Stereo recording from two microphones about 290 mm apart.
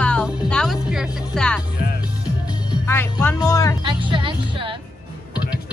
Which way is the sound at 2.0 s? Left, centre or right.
Centre.